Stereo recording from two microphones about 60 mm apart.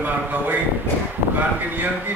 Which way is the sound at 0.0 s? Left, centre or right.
Right.